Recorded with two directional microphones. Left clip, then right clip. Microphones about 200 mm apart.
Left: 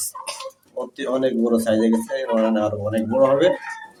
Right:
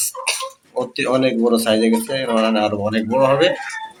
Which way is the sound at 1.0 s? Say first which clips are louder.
Right 3 dB; 10° right (ahead or behind).